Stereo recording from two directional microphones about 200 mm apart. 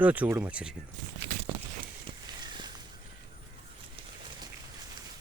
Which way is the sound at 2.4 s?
20° right (ahead or behind).